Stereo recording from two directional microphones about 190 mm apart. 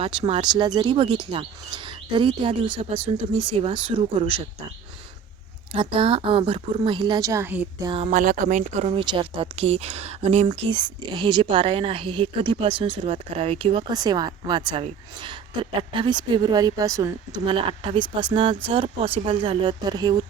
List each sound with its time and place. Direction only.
0.0 s speech: 30° right (ahead or behind)
5.7 s speech: 30° right (ahead or behind); by 7.7 s 10° right (ahead or behind)
7.9 s speech: 30° right (ahead or behind)
8.1 s speech: 45° right (ahead or behind)
9.0 s speech: 25° right (ahead or behind)